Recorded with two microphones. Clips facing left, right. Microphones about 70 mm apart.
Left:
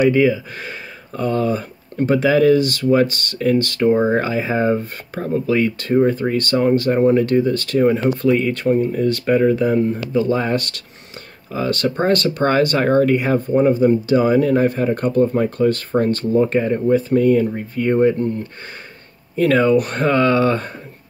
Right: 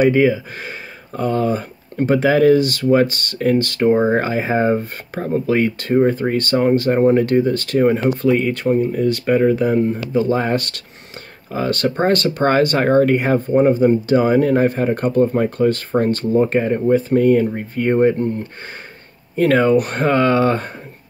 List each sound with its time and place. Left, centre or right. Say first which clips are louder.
0.0 s speech: right 1 dB; right
8.0 s speech: even; centre
10.1 s speech: right 1 dB; right
19.3 s speech: right 1 dB; right